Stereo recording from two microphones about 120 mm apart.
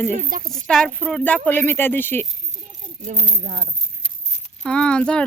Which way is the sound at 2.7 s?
90° right.